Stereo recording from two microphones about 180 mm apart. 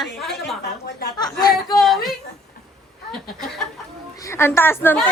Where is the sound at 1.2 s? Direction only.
20° left (ahead or behind).